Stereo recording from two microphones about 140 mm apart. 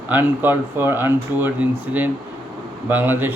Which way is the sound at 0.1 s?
15° right (ahead or behind).